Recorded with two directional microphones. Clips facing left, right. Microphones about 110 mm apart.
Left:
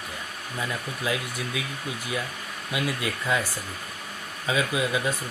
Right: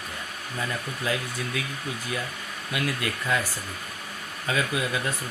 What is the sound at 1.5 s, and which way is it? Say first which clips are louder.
Speech: right 1 dB; 10° left (ahead or behind).